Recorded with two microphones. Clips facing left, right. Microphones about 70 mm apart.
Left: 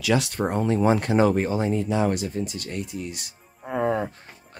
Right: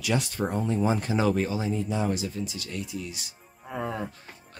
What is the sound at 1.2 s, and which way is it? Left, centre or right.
Speech, left.